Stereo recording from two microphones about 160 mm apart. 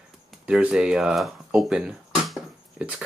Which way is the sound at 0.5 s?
5° right (ahead or behind).